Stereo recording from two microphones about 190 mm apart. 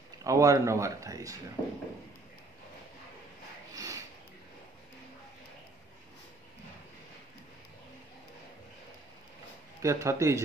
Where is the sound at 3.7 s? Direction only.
15° right (ahead or behind).